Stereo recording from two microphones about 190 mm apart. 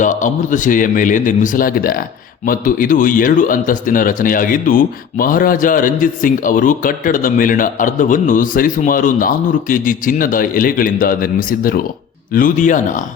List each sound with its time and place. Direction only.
0.0 s a man's voice: 40° left (ahead or behind)